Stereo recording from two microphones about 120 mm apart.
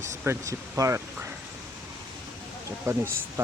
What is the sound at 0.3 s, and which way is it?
Speech, 25° right (ahead or behind).